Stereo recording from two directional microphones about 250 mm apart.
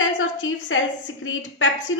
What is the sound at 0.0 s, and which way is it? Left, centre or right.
A woman's voice, left.